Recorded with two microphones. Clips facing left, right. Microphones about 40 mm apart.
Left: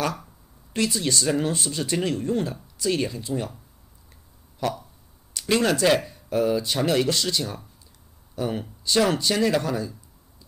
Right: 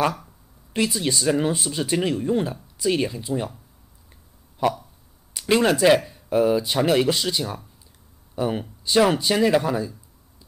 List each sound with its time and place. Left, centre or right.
0.7 s speech: centre
4.6 s speech: centre